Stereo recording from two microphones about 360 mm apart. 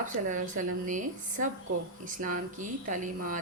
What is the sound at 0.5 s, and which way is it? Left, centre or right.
Speech, right.